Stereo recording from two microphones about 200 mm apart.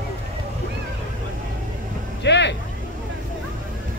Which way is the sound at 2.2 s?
60° left (ahead or behind).